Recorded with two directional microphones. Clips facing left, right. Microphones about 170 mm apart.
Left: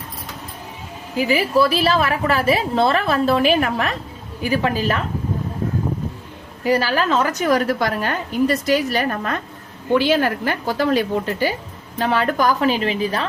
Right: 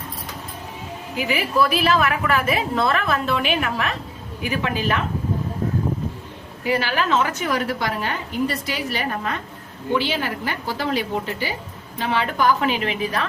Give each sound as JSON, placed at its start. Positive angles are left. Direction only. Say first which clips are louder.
{"t": 1.1, "sound": "a woman's voice", "louder": "left 5 dB", "side_deg": 35}
{"t": 6.7, "sound": "a woman's voice", "louder": "left 3 dB", "side_deg": 40}